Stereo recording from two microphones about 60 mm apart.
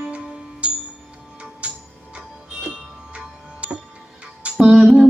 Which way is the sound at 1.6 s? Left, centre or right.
Right.